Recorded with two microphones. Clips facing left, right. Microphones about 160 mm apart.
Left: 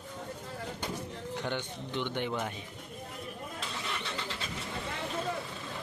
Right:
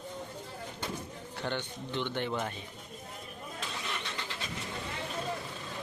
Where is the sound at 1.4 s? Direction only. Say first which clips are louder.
Right 3 dB; 15° left (ahead or behind).